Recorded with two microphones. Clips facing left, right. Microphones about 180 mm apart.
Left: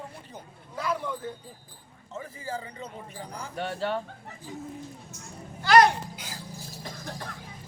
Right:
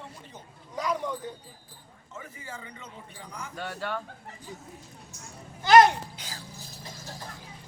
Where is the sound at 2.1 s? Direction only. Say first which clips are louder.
Left 7 dB; 30° left (ahead or behind).